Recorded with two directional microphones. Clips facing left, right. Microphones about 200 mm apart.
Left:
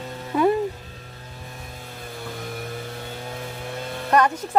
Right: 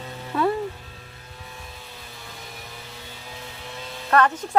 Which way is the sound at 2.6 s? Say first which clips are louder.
Left 9 dB; 55° left (ahead or behind).